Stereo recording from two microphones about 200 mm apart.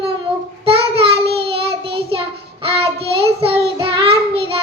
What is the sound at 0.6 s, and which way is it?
Child singing, 30° right (ahead or behind).